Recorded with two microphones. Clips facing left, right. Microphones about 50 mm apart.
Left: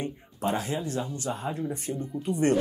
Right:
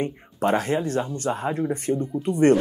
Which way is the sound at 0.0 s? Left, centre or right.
Right.